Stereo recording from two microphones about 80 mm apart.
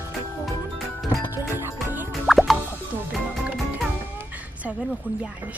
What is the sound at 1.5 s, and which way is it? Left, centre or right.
Music, right.